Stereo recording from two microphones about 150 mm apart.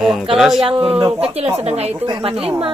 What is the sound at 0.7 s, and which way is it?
A woman's voice, 40° right (ahead or behind).